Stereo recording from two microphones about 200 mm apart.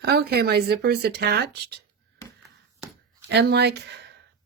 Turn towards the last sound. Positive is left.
turn(degrees=-55)  # may be behind; listen again after turning